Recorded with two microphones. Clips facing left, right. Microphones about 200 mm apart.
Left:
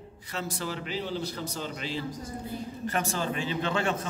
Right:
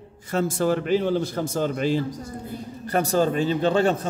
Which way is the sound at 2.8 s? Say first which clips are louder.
Right 10 dB; 35° right (ahead or behind).